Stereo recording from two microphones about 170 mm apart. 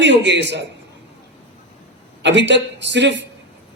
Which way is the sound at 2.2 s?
90° right.